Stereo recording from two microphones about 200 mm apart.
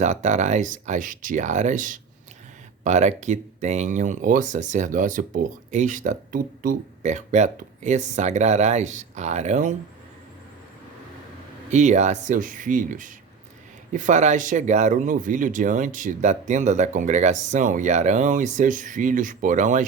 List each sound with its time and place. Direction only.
0.0 s speech: 35° right (ahead or behind)
11.7 s speech: 35° right (ahead or behind)